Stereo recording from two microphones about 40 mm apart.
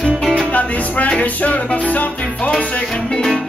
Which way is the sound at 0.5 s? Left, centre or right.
Left.